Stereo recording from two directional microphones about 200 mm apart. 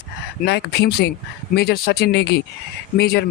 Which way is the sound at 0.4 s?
55° left (ahead or behind).